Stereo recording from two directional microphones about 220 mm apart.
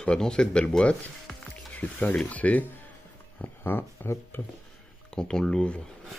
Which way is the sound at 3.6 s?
10° left (ahead or behind).